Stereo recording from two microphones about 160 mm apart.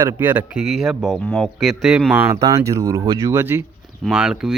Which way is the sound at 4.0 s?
5° right (ahead or behind).